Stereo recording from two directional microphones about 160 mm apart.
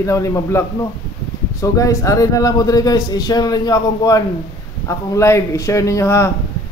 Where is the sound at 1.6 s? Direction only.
20° left (ahead or behind).